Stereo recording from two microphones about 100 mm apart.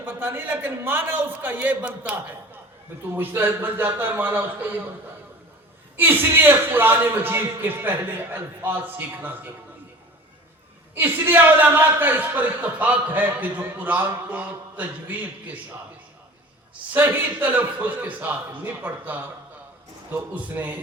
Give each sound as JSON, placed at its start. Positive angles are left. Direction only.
{"t": 0.0, "sound": "a man's voice", "side_deg": -20}
{"t": 6.0, "sound": "a man's voice", "side_deg": -20}
{"t": 10.9, "sound": "a man's voice", "side_deg": -20}
{"t": 16.9, "sound": "a man's voice", "side_deg": -20}
{"t": 20.3, "sound": "a man's voice", "side_deg": -15}